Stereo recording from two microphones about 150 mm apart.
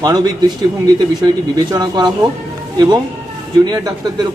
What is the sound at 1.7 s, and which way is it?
Speech, 25° right (ahead or behind).